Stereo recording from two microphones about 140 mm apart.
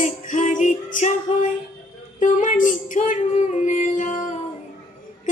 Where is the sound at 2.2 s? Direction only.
65° left (ahead or behind).